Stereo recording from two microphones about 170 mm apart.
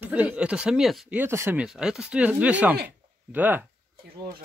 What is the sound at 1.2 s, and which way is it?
Speech, 15° right (ahead or behind).